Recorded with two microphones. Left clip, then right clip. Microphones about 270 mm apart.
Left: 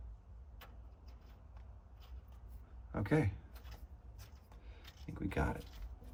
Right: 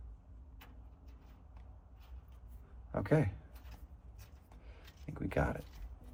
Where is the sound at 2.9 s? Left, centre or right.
Centre.